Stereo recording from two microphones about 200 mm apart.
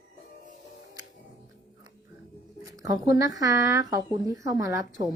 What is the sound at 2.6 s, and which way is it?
Speech, 20° right (ahead or behind).